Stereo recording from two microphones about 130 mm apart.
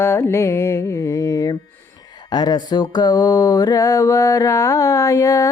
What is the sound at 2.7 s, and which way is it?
Music, 35° left (ahead or behind).